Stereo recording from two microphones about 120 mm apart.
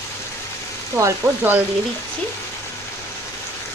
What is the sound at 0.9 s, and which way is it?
Frying, 20° right (ahead or behind).